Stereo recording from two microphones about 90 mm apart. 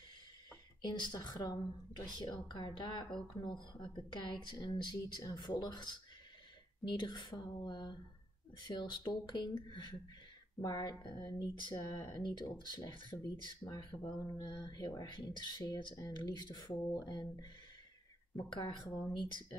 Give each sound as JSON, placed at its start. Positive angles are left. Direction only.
{"t": 0.8, "sound": "a woman's voice", "side_deg": 55}
{"t": 10.6, "sound": "speech", "side_deg": 50}
{"t": 11.7, "sound": "a woman's voice", "side_deg": 40}